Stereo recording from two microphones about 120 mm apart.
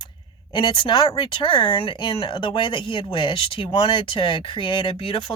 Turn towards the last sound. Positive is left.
turn(degrees=40)  # may be behind; listen again after turning